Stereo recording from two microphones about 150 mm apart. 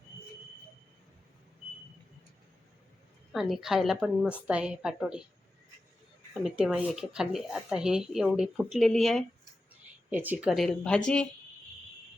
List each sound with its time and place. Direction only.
3.3 s speech: centre (ahead or behind)
6.4 s speech: 5° right (ahead or behind)
10.1 s speech: 10° right (ahead or behind); by 11.3 s 5° left (ahead or behind)